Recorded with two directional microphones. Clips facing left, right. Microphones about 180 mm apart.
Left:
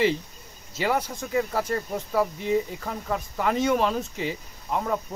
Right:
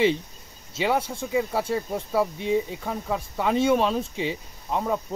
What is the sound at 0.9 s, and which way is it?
Speech, 30° right (ahead or behind).